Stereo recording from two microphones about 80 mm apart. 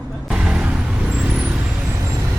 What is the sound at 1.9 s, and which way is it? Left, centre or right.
Vehicle, right.